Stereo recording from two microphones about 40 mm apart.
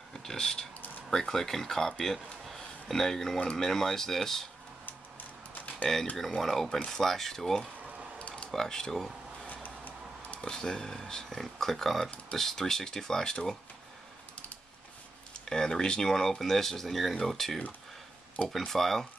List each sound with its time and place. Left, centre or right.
0.1 s speech: centre
2.4 s a sound: centre
3.5 s speech: centre
5.9 s speech: centre
9.5 s a sound: left
10.5 s speech: centre
15.3 s speech: centre
18.7 s speech: centre